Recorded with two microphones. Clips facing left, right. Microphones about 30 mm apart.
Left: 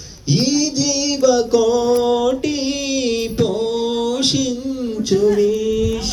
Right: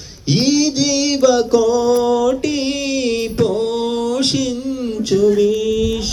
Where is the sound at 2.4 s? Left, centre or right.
Right.